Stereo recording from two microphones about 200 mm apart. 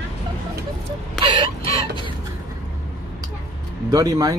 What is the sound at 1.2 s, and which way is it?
Chicken, 25° right (ahead or behind).